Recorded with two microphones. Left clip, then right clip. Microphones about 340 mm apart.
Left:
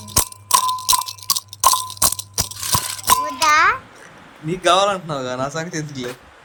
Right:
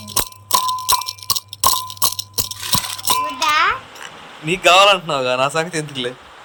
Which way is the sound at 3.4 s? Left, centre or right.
Centre.